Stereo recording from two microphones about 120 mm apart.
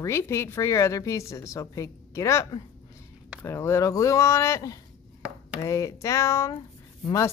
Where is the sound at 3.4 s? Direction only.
20° left (ahead or behind).